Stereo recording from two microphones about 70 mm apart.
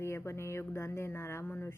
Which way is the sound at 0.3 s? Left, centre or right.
Left.